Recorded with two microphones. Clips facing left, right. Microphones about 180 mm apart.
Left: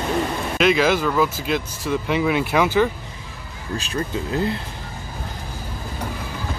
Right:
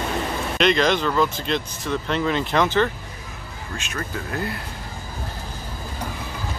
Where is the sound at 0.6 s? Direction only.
5° left (ahead or behind).